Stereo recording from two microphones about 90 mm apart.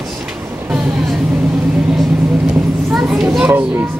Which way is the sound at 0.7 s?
5° right (ahead or behind).